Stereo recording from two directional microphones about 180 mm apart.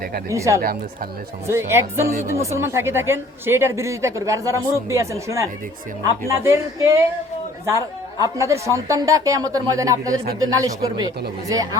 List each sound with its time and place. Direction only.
0.3 s a woman's voice: 15° right (ahead or behind)
8.2 s speech: 15° right (ahead or behind)